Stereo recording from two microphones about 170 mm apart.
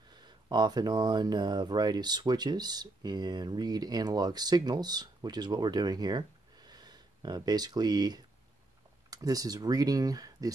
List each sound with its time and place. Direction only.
0.1 s speech: 25° right (ahead or behind)